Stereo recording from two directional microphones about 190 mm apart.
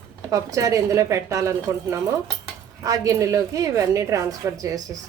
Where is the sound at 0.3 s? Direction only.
15° right (ahead or behind).